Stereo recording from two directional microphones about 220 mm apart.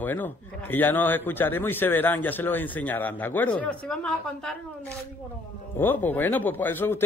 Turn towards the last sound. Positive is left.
turn(degrees=10)  # may be behind; listen again after turning